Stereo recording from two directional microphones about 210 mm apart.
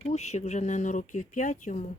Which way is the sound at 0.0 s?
30° left (ahead or behind).